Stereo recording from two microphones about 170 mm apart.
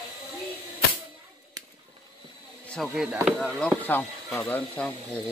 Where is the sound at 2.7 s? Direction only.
Centre (ahead or behind).